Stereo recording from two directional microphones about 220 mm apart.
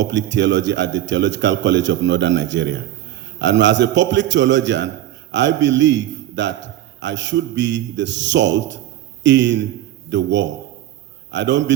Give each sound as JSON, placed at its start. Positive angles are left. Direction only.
{"t": 0.0, "sound": "a man's voice", "side_deg": -55}